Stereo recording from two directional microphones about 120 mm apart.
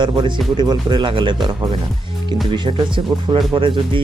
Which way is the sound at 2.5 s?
40° right (ahead or behind).